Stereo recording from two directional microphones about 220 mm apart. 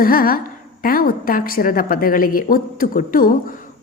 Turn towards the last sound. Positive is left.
turn(degrees=40)  # may be behind; listen again after turning